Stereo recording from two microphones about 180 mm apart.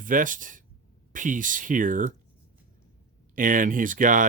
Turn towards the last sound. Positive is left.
turn(degrees=-45)  # may be behind; listen again after turning